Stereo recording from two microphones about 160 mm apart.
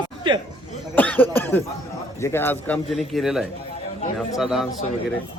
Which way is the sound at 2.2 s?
15° left (ahead or behind).